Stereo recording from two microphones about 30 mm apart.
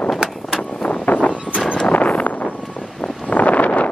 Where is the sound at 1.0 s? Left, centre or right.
Left.